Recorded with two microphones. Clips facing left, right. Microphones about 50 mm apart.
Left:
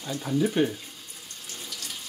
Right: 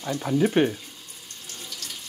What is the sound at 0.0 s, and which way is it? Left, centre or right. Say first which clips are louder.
Speech: right 3 dB; right.